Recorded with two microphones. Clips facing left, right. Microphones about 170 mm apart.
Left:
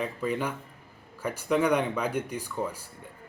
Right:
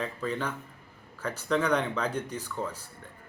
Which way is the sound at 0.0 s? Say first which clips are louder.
Left 2 dB; 10° left (ahead or behind).